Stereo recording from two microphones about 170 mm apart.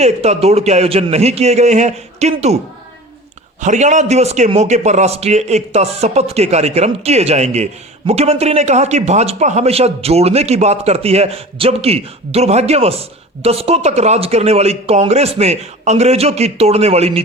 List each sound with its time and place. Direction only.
0.0 s a man's voice: 40° right (ahead or behind)
3.6 s a man's voice: 45° right (ahead or behind)